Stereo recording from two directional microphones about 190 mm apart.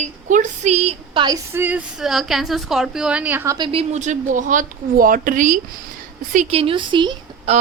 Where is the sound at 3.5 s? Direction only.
25° right (ahead or behind); by 5.6 s 45° right (ahead or behind).